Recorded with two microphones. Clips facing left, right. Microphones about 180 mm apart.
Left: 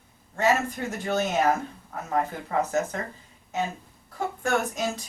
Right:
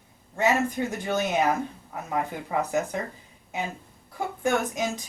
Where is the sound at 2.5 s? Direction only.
15° right (ahead or behind).